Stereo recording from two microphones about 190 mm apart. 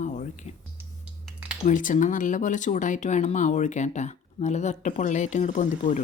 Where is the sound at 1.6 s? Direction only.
45° left (ahead or behind).